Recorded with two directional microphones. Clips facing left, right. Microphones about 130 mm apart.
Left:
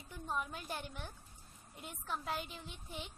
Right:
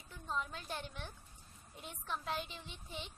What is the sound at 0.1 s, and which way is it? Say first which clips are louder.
A woman's voice: left 1 dB; 15° left (ahead or behind).